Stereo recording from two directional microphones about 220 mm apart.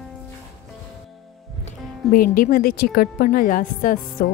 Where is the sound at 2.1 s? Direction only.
40° left (ahead or behind).